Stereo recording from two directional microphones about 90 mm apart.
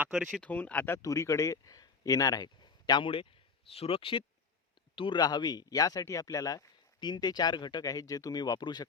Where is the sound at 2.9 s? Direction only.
65° left (ahead or behind).